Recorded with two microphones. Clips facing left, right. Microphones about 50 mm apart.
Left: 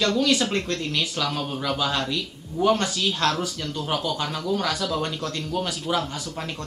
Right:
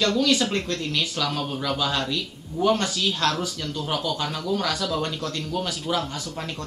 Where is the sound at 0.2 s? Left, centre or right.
Left.